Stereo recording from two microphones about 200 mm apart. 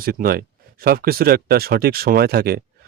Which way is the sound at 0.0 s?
45° right (ahead or behind).